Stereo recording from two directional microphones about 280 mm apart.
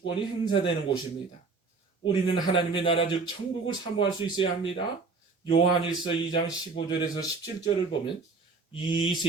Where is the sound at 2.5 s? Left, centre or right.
Centre.